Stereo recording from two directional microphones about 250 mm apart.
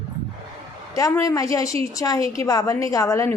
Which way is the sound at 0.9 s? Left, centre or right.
Centre.